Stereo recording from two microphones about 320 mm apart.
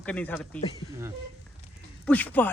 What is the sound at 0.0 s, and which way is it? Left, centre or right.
Speech, centre.